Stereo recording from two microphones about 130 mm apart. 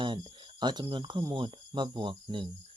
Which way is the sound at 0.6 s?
35° right (ahead or behind).